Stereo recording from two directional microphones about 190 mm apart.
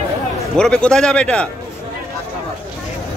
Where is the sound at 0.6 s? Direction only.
5° left (ahead or behind).